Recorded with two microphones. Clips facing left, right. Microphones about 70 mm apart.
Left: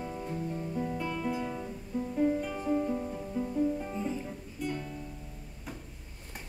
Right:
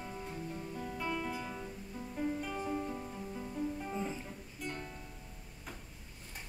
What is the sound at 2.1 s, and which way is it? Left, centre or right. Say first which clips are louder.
Music: left 7 dB; centre.